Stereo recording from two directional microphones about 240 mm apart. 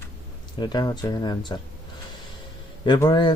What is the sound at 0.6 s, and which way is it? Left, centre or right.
Speech, centre.